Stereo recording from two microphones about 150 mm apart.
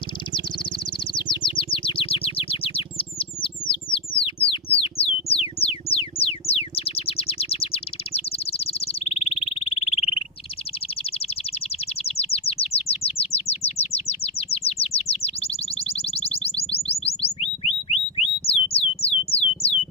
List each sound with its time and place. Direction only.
1.1 s bird: 35° left (ahead or behind)
12.0 s chirp: 40° left (ahead or behind)
18.4 s music: 40° left (ahead or behind)